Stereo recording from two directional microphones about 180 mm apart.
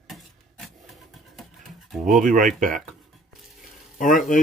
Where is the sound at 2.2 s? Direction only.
45° right (ahead or behind).